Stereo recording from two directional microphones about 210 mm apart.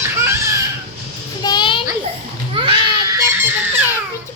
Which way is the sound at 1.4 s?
20° left (ahead or behind).